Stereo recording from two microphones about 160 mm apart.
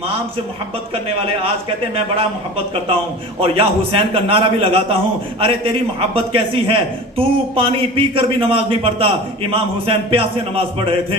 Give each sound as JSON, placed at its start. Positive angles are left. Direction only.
{"t": 2.1, "sound": "a man's voice", "side_deg": -35}